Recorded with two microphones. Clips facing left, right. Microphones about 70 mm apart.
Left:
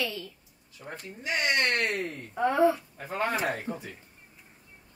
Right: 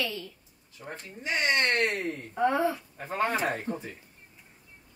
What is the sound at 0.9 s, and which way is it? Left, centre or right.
Speech, right.